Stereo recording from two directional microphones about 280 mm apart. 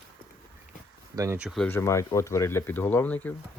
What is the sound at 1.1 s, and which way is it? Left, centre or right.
Speech, centre.